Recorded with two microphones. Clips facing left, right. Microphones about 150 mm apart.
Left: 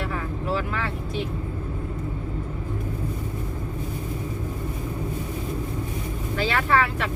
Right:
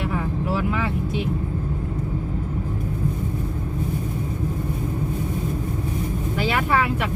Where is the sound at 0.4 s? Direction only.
10° right (ahead or behind).